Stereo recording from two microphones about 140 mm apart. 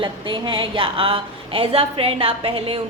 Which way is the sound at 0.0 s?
35° right (ahead or behind).